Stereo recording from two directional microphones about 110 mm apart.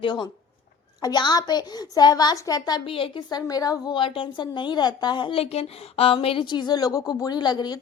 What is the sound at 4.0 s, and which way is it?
A woman's voice, 50° left (ahead or behind).